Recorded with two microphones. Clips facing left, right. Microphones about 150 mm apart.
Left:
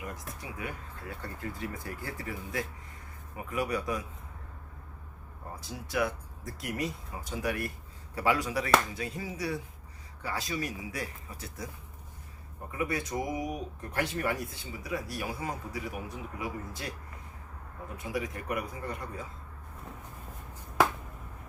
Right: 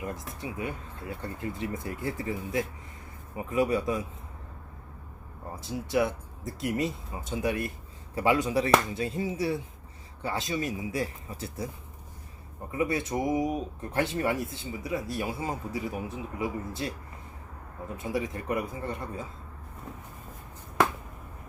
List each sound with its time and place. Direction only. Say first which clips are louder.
0.0 s speech: right 5 dB; 25° right (ahead or behind)
5.6 s speech: right 5 dB; 25° right (ahead or behind)
12.7 s speech: right 4 dB; 25° right (ahead or behind)
17.9 s speech: right 4 dB; 25° right (ahead or behind)